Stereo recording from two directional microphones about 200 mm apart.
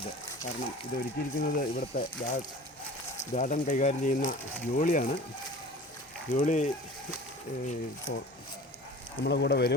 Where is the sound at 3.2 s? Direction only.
40° left (ahead or behind).